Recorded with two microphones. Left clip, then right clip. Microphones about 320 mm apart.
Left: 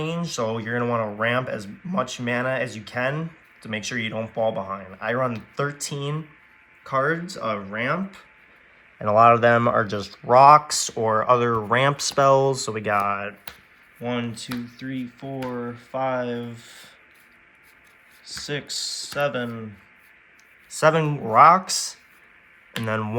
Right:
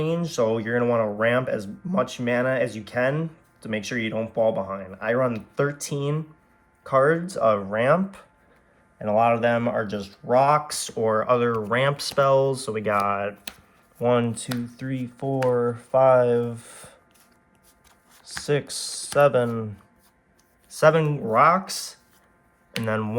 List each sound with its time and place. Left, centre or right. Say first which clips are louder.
0.0 s speech: right 3 dB; centre
9.0 s speech: left 5 dB; centre
14.0 s speech: right 7 dB; centre
18.3 s speech: right 5 dB; centre
20.7 s speech: right 1 dB; centre